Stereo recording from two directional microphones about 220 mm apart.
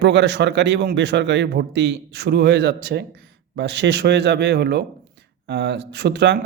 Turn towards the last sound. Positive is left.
turn(degrees=-50)  # may be behind; listen again after turning